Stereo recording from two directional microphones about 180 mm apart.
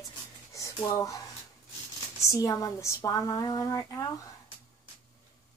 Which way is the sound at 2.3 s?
20° left (ahead or behind).